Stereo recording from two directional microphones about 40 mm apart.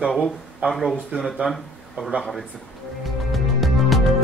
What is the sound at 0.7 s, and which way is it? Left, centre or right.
A man's voice, centre.